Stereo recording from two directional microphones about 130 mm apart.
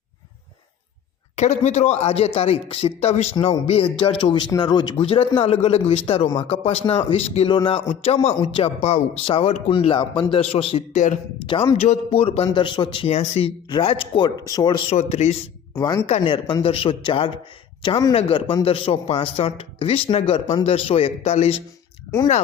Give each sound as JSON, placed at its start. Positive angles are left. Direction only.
{"t": 1.4, "sound": "speech", "side_deg": 60}
{"t": 13.7, "sound": "speech", "side_deg": 35}
{"t": 14.9, "sound": "a man's voice", "side_deg": 55}
{"t": 15.7, "sound": "speech", "side_deg": 30}
{"t": 16.0, "sound": "speech", "side_deg": 45}